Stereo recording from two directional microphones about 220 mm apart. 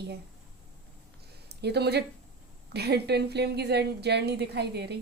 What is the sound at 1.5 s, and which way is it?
A woman's voice, 50° right (ahead or behind).